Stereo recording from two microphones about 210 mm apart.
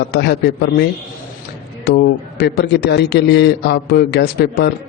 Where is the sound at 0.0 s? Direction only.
50° left (ahead or behind).